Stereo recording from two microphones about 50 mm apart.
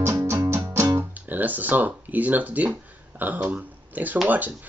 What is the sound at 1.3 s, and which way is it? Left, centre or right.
Music, right.